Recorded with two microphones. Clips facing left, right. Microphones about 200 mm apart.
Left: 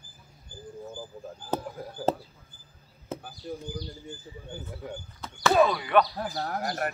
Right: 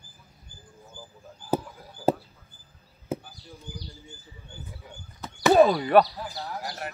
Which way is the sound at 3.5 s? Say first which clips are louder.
Left 12 dB; 65° left (ahead or behind).